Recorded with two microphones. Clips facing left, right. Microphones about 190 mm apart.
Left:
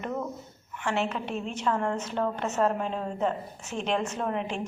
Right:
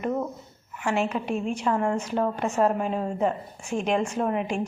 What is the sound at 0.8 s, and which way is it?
A woman's voice, 10° right (ahead or behind).